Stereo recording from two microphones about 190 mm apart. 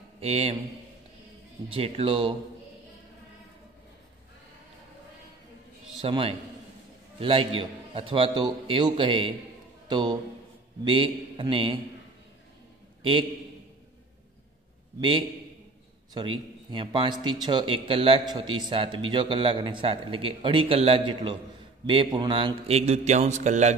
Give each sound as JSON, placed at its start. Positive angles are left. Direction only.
{"t": 0.2, "sound": "a man's voice", "side_deg": -30}
{"t": 1.7, "sound": "a man's voice", "side_deg": -30}
{"t": 5.9, "sound": "a man's voice", "side_deg": -30}
{"t": 15.0, "sound": "a man's voice", "side_deg": -25}